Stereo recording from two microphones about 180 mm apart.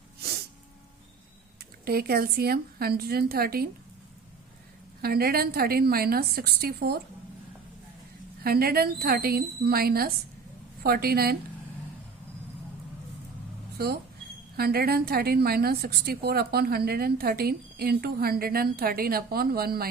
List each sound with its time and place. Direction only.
1.8 s a woman's voice: 60° right (ahead or behind)
5.0 s a woman's voice: 55° right (ahead or behind)
8.4 s a woman's voice: 55° right (ahead or behind)
13.7 s a woman's voice: 60° right (ahead or behind)